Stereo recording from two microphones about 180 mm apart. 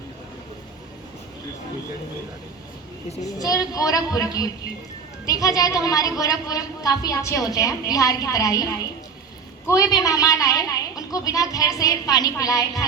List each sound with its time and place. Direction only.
3.3 s speech: 20° left (ahead or behind)
9.6 s speech: 20° left (ahead or behind)